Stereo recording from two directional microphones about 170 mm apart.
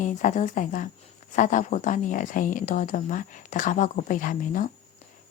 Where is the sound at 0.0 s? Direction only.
45° left (ahead or behind).